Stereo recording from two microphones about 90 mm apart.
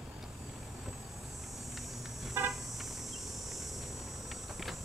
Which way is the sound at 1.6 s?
Centre (ahead or behind).